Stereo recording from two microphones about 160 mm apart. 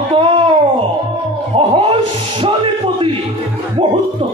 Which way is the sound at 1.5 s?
35° right (ahead or behind).